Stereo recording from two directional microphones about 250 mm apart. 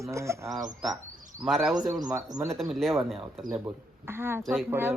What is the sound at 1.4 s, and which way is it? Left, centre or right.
Speech, centre.